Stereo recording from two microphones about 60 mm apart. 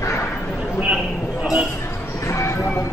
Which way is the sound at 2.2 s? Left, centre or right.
Left.